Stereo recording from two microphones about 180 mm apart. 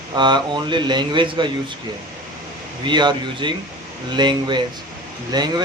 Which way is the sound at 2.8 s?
25° right (ahead or behind).